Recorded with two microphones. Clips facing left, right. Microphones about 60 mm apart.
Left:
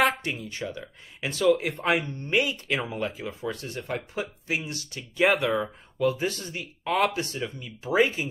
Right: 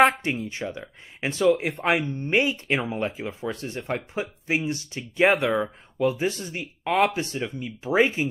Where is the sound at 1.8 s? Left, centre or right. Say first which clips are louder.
Right 2 dB; centre.